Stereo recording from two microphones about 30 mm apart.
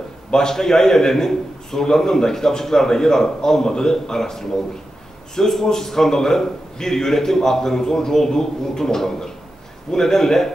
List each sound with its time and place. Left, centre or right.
0.3 s a man's voice: centre